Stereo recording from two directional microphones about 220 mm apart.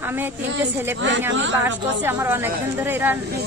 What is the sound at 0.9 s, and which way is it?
Speech, 55° right (ahead or behind).